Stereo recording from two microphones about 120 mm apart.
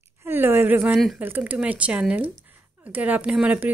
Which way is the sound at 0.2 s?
20° right (ahead or behind).